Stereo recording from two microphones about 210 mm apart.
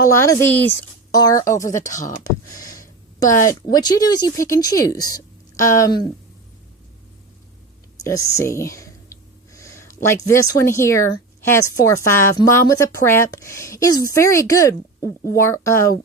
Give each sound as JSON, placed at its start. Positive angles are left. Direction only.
{"t": 0.1, "sound": "a woman's voice", "side_deg": 15}
{"t": 1.9, "sound": "speech", "side_deg": 35}
{"t": 3.2, "sound": "a woman's voice", "side_deg": 15}
{"t": 8.0, "sound": "a woman's voice", "side_deg": 15}